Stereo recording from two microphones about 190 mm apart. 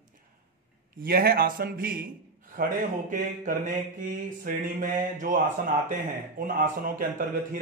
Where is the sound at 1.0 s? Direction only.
55° right (ahead or behind).